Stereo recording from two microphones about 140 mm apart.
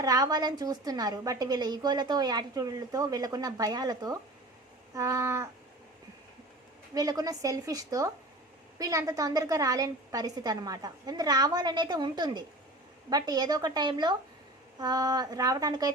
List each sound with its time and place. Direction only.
0.0 s a woman's voice: 25° right (ahead or behind)
6.9 s a woman's voice: 25° right (ahead or behind)